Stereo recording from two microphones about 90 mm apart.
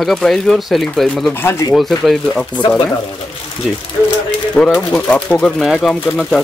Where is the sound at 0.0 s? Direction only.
5° left (ahead or behind).